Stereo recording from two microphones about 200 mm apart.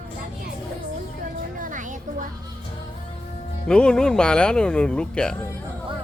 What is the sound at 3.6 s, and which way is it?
Speech, 5° left (ahead or behind).